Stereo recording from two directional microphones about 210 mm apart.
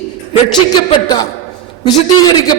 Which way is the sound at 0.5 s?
20° left (ahead or behind).